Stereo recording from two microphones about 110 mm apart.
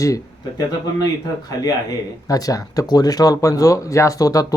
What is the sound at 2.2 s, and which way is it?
Speech, 30° left (ahead or behind).